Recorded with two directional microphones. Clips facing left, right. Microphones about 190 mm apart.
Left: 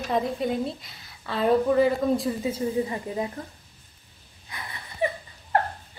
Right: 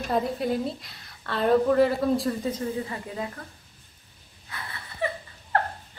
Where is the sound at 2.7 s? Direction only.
20° left (ahead or behind).